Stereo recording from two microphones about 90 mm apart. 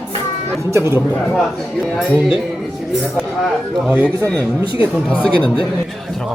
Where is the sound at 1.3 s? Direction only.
Centre (ahead or behind).